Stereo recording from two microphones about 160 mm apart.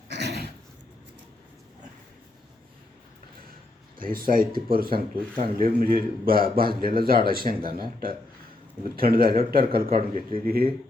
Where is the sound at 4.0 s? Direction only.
65° right (ahead or behind).